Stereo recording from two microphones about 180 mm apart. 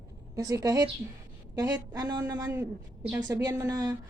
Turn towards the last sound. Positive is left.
turn(degrees=-20)  # may be behind; listen again after turning